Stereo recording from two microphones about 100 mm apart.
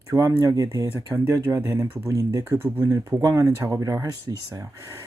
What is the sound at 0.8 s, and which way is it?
Speech, 20° right (ahead or behind).